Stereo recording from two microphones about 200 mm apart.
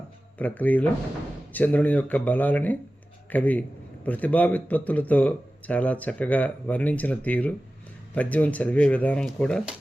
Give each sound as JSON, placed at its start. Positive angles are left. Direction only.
{"t": 0.3, "sound": "a man's voice", "side_deg": 10}